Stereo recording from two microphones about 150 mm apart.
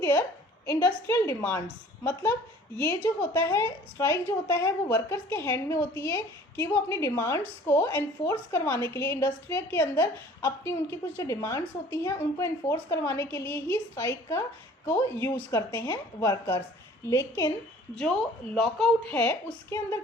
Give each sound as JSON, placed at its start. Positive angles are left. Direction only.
{"t": 0.0, "sound": "a woman's voice", "side_deg": 15}
{"t": 2.7, "sound": "a woman's voice", "side_deg": 15}
{"t": 17.9, "sound": "speech", "side_deg": 5}
{"t": 19.1, "sound": "a woman's voice", "side_deg": 15}